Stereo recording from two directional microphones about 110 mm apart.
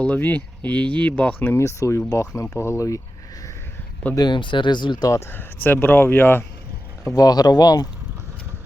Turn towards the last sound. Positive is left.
turn(degrees=35)  # may be behind; listen again after turning